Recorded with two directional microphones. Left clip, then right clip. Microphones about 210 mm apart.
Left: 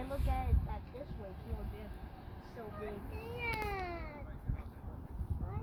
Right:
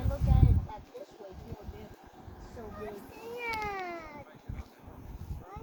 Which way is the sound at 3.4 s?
20° right (ahead or behind).